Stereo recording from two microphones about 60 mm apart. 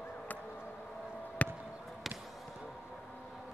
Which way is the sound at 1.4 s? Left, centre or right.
Left.